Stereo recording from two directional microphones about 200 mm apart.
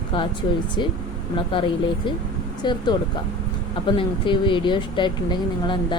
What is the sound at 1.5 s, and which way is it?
Speech, 25° left (ahead or behind).